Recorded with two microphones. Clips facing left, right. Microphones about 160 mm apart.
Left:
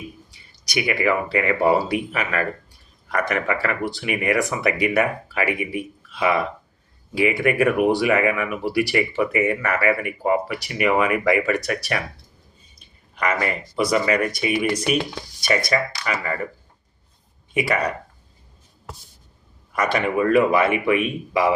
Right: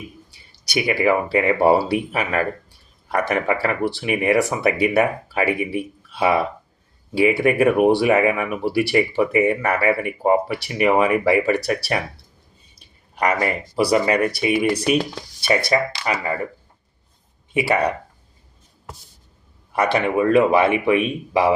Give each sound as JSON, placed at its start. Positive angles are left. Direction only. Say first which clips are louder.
{"t": 0.7, "sound": "speech", "louder": "right 3 dB", "side_deg": -30}
{"t": 13.1, "sound": "speech", "louder": "right 3 dB", "side_deg": -35}
{"t": 17.5, "sound": "speech", "louder": "right 3 dB", "side_deg": -30}
{"t": 19.7, "sound": "speech", "louder": "right 2 dB", "side_deg": -30}